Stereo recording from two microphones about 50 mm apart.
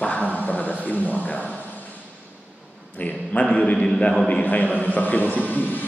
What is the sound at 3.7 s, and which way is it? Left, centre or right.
Speech, centre.